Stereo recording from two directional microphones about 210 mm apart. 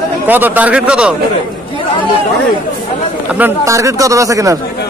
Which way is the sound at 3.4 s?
15° right (ahead or behind).